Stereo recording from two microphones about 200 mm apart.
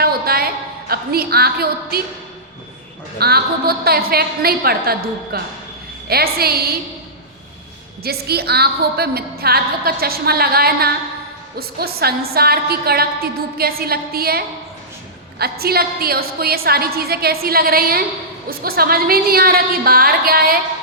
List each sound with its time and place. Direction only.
0.0 s a sound: 50° right (ahead or behind)
3.2 s a woman's voice: 50° right (ahead or behind)
8.0 s a woman's voice: 50° right (ahead or behind)